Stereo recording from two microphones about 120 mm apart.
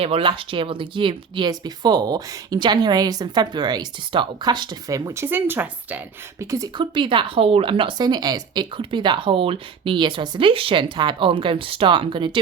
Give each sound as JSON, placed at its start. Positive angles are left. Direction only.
{"t": 0.0, "sound": "speech", "side_deg": -50}
{"t": 5.2, "sound": "speech", "side_deg": -15}
{"t": 6.4, "sound": "speech", "side_deg": -30}
{"t": 6.7, "sound": "speech", "side_deg": -45}